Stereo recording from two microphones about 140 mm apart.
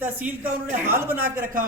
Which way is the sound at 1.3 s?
80° right.